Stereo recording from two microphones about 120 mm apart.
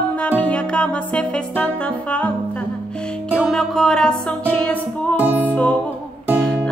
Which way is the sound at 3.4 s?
Centre (ahead or behind).